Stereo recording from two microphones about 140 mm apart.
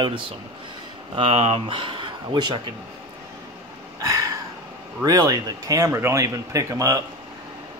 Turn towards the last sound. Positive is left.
turn(degrees=-25)  # may be behind; listen again after turning